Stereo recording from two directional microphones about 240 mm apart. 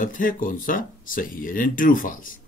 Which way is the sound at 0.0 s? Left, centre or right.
Left.